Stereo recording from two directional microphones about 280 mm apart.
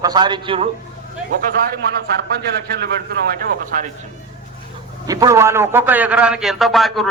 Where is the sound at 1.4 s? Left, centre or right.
Right.